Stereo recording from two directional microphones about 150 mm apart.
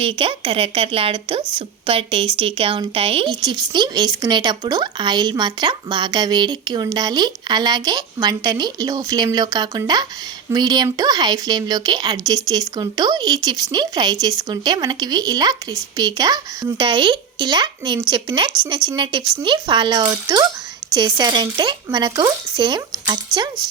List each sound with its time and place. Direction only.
0.0 s speech: 35° right (ahead or behind)